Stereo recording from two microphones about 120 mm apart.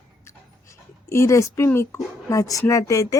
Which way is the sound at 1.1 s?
25° left (ahead or behind).